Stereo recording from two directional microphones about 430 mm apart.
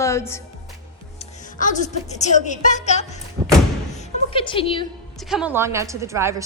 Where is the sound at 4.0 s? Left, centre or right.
Centre.